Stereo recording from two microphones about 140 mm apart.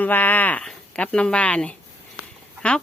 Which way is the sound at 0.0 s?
10° left (ahead or behind).